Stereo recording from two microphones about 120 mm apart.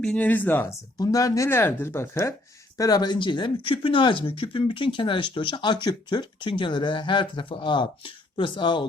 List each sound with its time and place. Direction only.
0.0 s speech: 10° left (ahead or behind)
0.9 s speech: 30° left (ahead or behind)